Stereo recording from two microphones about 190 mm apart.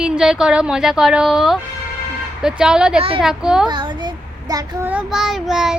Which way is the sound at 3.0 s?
30° right (ahead or behind).